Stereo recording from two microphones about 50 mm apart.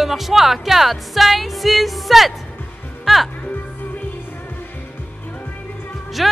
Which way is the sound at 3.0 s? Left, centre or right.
Centre.